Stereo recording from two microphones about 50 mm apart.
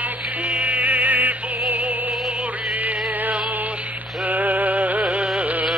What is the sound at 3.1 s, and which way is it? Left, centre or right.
Music, right.